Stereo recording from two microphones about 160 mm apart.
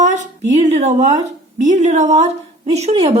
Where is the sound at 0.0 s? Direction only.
50° right (ahead or behind).